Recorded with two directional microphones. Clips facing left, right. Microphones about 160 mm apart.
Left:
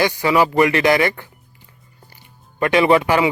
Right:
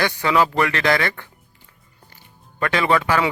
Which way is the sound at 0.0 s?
10° left (ahead or behind).